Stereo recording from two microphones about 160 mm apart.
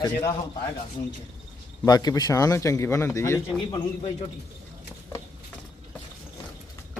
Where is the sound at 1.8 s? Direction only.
25° left (ahead or behind).